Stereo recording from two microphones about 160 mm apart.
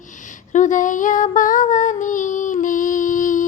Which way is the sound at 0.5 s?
50° left (ahead or behind).